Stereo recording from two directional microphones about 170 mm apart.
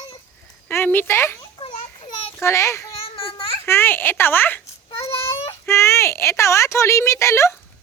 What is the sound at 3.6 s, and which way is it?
Speech, 15° left (ahead or behind).